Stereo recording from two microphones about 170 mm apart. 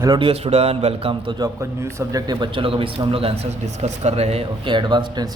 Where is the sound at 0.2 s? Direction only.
35° right (ahead or behind).